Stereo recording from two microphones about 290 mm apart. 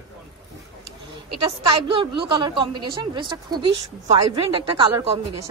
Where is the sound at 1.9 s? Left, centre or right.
Centre.